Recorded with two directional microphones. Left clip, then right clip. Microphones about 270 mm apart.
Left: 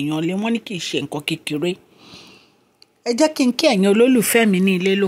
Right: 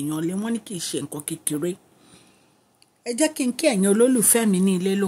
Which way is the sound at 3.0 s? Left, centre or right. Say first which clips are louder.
Left 6 dB; centre.